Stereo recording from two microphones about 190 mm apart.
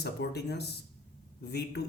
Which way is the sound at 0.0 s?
60° left (ahead or behind).